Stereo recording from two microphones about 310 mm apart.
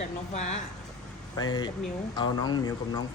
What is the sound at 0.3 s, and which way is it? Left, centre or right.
A man's voice, left.